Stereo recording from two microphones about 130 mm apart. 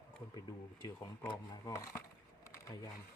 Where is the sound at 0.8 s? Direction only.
30° left (ahead or behind).